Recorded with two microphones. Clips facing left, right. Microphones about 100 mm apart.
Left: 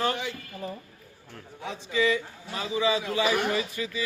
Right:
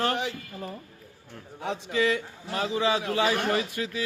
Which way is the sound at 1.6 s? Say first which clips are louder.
Even; 55° right (ahead or behind).